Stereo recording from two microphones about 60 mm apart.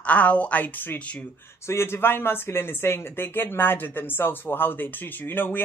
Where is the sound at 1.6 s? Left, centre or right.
Left.